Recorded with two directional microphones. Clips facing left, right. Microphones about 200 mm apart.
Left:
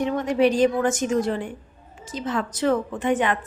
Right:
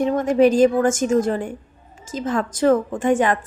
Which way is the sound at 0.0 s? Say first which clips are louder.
Right 4 dB; 45° right (ahead or behind).